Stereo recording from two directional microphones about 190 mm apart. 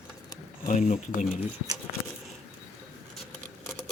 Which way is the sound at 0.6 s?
35° left (ahead or behind).